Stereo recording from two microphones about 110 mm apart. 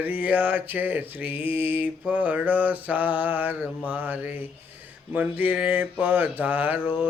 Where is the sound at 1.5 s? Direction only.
55° left (ahead or behind).